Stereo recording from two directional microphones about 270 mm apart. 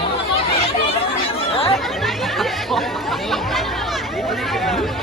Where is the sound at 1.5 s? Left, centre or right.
Left.